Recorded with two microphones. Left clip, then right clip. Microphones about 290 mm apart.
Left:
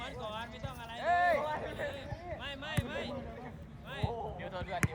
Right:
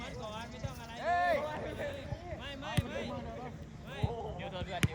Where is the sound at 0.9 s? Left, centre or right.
Centre.